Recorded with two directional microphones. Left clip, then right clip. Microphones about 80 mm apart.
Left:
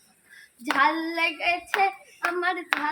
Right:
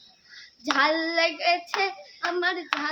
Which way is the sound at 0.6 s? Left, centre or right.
Right.